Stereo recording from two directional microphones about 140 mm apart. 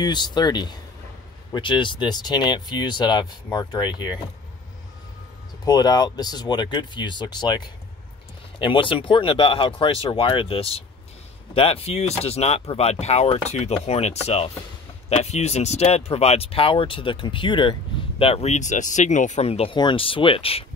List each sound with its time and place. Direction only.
0.0 s speech: 30° left (ahead or behind)
5.7 s speech: 30° left (ahead or behind)
18.2 s speech: 50° left (ahead or behind)